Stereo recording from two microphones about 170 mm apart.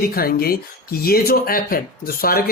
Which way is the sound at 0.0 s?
60° left (ahead or behind).